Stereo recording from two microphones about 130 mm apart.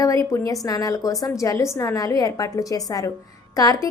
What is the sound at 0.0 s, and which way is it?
A woman's voice, 25° left (ahead or behind).